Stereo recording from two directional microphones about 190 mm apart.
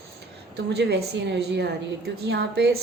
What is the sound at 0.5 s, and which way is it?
A woman's voice, 60° right (ahead or behind).